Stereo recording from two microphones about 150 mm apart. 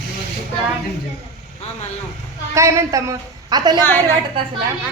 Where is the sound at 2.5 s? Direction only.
20° right (ahead or behind).